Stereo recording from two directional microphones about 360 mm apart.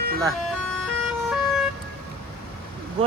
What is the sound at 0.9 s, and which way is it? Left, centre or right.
Emergency vehicle, centre.